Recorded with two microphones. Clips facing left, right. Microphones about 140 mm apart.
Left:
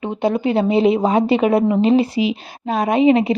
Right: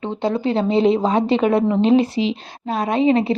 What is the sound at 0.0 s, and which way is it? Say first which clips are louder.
A woman's voice: left 2 dB; 10° left (ahead or behind).